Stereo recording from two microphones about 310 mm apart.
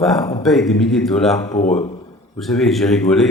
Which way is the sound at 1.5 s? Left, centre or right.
Left.